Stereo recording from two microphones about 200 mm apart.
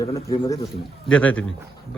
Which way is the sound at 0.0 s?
15° left (ahead or behind).